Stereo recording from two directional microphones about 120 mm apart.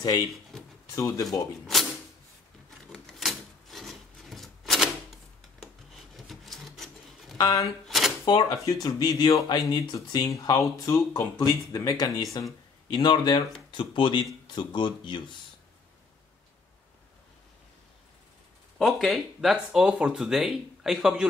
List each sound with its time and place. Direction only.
0.3 s drawer open or close: centre (ahead or behind)
0.9 s speech: 25° left (ahead or behind)
2.9 s a sound: centre (ahead or behind)
7.3 s speech: 30° left (ahead or behind)
7.8 s a sound: centre (ahead or behind)
8.3 s speech: 35° left (ahead or behind)
18.8 s speech: centre (ahead or behind)